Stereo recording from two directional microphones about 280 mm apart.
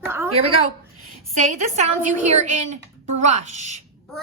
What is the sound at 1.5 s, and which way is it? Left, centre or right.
A woman's voice, right.